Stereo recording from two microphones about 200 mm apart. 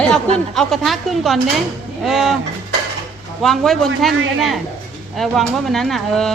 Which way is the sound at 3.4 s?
Centre (ahead or behind).